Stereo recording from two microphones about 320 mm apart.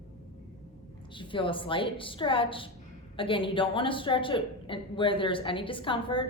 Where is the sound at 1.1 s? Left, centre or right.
Centre.